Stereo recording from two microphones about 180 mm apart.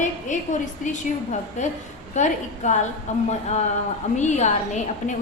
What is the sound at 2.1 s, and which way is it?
Speech, 40° left (ahead or behind).